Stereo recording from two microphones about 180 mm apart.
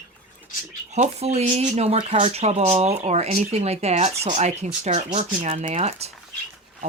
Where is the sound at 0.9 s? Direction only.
40° right (ahead or behind).